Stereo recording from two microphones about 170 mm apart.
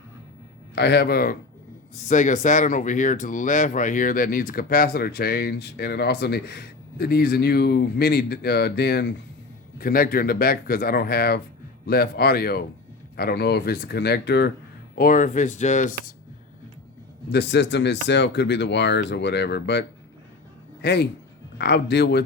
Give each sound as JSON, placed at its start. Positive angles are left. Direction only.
{"t": 0.8, "sound": "speech", "side_deg": 80}
{"t": 2.0, "sound": "speech", "side_deg": 45}
{"t": 9.7, "sound": "speech", "side_deg": 60}
{"t": 14.9, "sound": "speech", "side_deg": 55}
{"t": 17.2, "sound": "speech", "side_deg": 80}
{"t": 20.8, "sound": "speech", "side_deg": 75}